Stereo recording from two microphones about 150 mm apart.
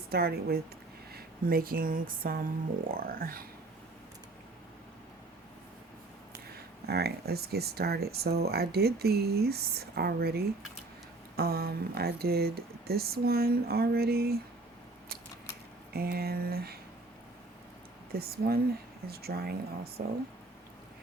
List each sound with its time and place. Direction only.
0.1 s speech: 90° right; by 3.4 s 75° right (ahead or behind)
6.3 s speech: 90° right
15.9 s speech: 90° right
18.1 s speech: 90° right